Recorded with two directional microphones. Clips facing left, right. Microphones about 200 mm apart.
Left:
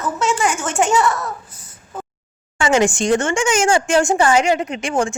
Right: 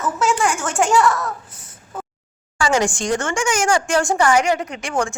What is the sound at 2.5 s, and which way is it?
Speech, 20° left (ahead or behind).